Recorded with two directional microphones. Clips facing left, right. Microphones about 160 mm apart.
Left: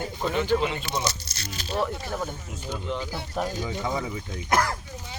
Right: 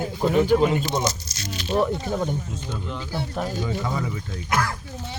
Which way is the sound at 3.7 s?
15° left (ahead or behind).